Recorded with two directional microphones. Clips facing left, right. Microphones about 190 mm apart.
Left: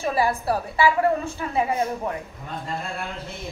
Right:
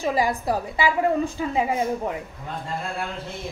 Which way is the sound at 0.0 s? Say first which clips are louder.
Even; 20° right (ahead or behind).